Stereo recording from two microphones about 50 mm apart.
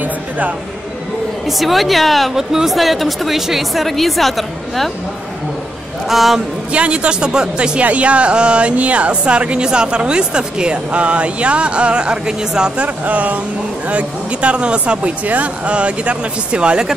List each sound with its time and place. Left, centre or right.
1.6 s a woman's voice: centre
6.0 s a woman's voice: centre
6.7 s speech: right
12.7 s speech: right